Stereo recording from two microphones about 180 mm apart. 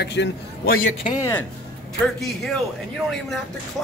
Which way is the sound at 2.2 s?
Centre (ahead or behind).